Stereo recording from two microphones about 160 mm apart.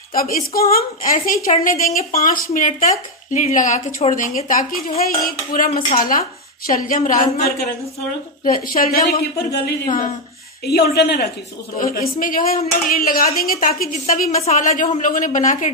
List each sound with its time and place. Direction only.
0.1 s speech: 65° left (ahead or behind)
10.6 s a woman's voice: 90° left
11.8 s speech: 65° left (ahead or behind)